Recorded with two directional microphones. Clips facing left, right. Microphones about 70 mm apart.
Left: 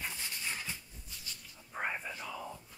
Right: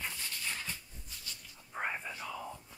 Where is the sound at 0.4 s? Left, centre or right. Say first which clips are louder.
Even; centre.